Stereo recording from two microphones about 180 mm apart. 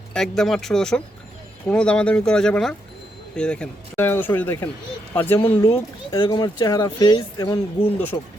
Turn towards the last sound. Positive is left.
turn(degrees=30)  # may be behind; listen again after turning